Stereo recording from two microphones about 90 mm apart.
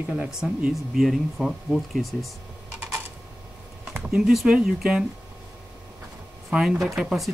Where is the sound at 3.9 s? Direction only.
5° right (ahead or behind).